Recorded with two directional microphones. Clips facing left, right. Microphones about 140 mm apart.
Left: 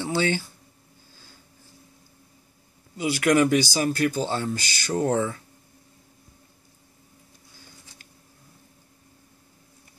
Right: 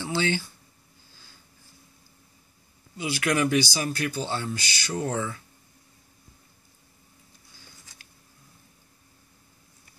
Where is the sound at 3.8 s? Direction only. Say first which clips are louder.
Left 6 dB; 35° left (ahead or behind).